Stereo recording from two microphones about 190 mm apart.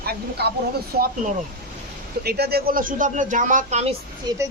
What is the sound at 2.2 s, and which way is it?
Speech, 55° right (ahead or behind).